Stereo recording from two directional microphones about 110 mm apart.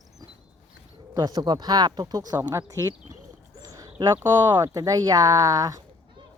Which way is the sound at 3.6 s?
30° right (ahead or behind).